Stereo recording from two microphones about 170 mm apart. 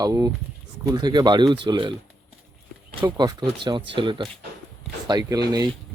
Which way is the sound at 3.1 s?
25° right (ahead or behind).